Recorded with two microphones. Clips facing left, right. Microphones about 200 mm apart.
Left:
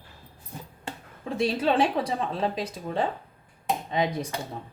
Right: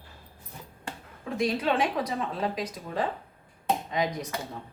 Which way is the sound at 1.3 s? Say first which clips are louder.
Left 3 dB; 30° left (ahead or behind).